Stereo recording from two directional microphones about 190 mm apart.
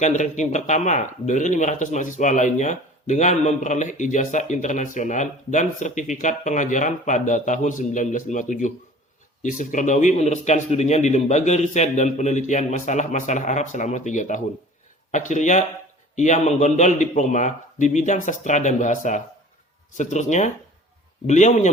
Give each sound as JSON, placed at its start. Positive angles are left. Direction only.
{"t": 0.0, "sound": "speech", "side_deg": 40}